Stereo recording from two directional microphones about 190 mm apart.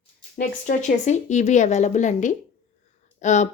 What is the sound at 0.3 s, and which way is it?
Speech, 40° left (ahead or behind).